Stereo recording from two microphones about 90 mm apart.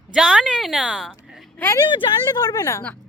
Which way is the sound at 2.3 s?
45° left (ahead or behind).